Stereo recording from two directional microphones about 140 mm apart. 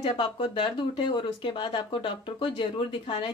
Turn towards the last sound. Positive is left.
turn(degrees=35)  # may be behind; listen again after turning